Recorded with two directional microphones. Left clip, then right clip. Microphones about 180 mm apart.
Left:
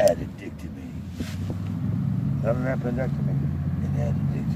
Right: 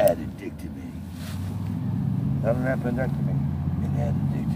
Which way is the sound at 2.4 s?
15° left (ahead or behind).